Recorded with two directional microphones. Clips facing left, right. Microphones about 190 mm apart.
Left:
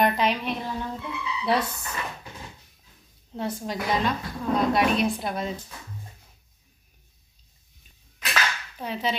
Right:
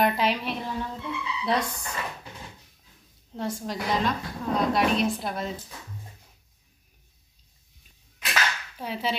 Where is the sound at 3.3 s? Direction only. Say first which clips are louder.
Left 1 dB; centre (ahead or behind).